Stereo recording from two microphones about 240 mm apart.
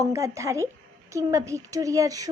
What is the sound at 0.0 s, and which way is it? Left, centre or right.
A woman's voice, centre.